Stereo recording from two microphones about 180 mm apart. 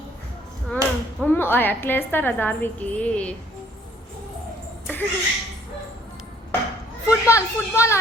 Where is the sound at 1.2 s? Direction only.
10° left (ahead or behind).